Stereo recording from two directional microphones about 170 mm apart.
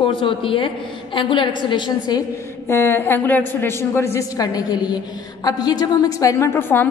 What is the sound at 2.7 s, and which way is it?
A woman's voice, 15° left (ahead or behind).